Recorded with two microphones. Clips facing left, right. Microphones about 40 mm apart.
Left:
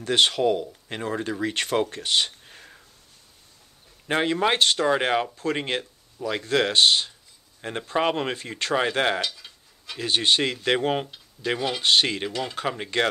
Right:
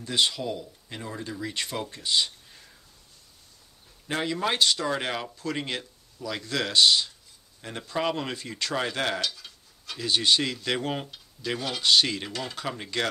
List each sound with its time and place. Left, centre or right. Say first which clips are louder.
0.0 s speech: left 6 dB; left
4.1 s speech: left 5 dB; left; by 9.9 s centre
9.9 s speech: left 2 dB; left
11.8 s speech: even; left